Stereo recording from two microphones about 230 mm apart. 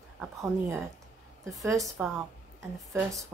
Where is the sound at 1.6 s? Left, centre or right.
Centre.